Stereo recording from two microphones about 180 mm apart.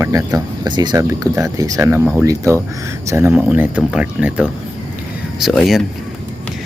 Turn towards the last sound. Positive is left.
turn(degrees=0)  # may be behind; listen again after turning